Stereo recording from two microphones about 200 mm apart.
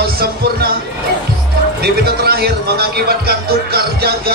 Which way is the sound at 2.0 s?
50° right (ahead or behind).